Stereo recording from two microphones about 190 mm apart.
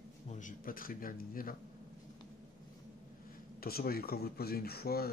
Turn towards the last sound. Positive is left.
turn(degrees=55)  # may be behind; listen again after turning